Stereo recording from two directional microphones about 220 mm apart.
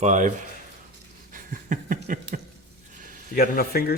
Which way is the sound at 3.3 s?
40° left (ahead or behind).